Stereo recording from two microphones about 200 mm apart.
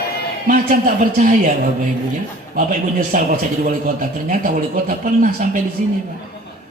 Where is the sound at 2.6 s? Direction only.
45° right (ahead or behind).